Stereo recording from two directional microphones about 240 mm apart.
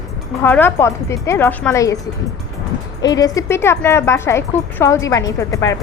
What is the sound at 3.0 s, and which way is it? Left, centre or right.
A woman's voice, centre.